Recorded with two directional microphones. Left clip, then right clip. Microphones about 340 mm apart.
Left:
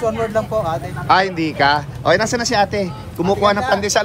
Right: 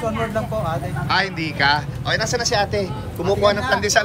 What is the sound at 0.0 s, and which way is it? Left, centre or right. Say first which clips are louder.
Speech: left 4 dB; left.